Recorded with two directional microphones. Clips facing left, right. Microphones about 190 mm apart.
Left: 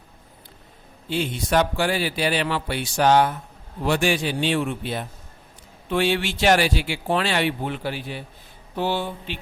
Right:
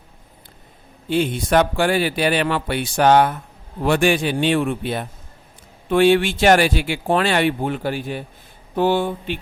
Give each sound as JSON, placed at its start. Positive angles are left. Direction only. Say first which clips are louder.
{"t": 1.1, "sound": "speech", "louder": "right 5 dB", "side_deg": -55}